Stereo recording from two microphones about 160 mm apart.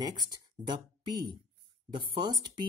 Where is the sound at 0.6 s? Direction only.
30° right (ahead or behind).